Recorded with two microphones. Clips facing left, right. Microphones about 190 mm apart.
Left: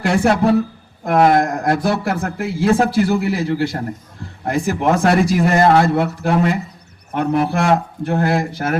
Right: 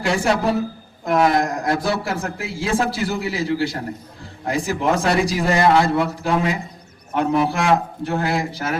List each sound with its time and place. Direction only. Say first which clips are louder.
0.0 s a man's voice: left 4 dB; 55° left (ahead or behind)